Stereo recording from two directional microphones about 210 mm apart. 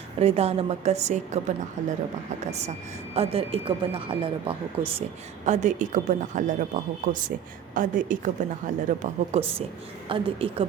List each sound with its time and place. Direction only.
0.2 s a woman's voice: 30° right (ahead or behind)